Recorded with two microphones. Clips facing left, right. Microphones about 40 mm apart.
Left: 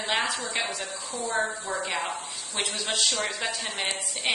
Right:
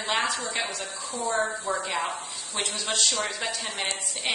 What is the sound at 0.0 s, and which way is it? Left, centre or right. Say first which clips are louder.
Speech: right 1 dB; centre.